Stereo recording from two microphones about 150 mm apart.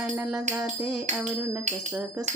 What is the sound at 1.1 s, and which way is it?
Music, 50° right (ahead or behind).